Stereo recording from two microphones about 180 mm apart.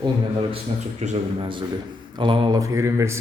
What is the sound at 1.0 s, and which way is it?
Speech, 40° right (ahead or behind).